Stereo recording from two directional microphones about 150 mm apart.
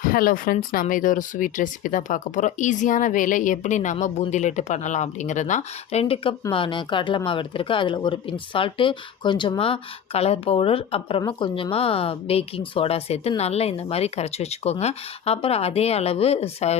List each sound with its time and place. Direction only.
0.0 s speech: 70° left (ahead or behind); by 16.7 s 45° left (ahead or behind)